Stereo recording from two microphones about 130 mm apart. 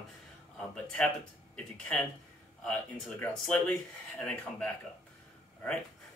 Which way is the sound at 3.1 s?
15° left (ahead or behind).